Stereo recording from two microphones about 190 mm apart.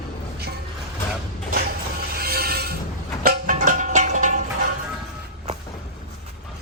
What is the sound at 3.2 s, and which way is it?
Music, 45° right (ahead or behind).